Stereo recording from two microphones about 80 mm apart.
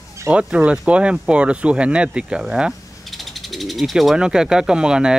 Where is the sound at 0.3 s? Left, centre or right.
Centre.